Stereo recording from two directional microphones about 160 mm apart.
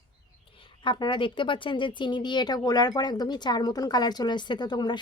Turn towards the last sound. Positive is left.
turn(degrees=25)  # may be behind; listen again after turning